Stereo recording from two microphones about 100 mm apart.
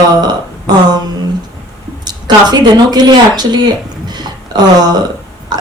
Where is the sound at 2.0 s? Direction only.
45° right (ahead or behind).